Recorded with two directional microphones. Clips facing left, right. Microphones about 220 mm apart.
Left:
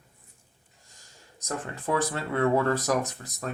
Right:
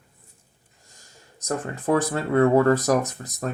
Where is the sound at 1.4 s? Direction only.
45° right (ahead or behind).